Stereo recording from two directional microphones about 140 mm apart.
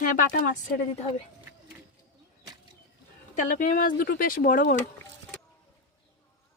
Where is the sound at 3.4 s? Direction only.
65° left (ahead or behind); by 4.7 s 85° left.